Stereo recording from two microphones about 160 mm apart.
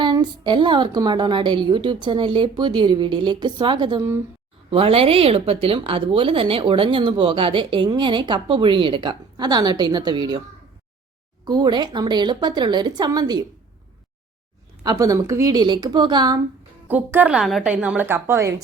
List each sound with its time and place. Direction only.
0.0 s a woman's voice: 30° right (ahead or behind)
11.4 s a woman's voice: 25° right (ahead or behind)
14.8 s a woman's voice: 20° right (ahead or behind)
16.9 s a woman's voice: 10° right (ahead or behind)